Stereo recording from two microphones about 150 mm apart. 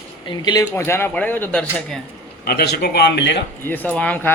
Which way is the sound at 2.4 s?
90° left.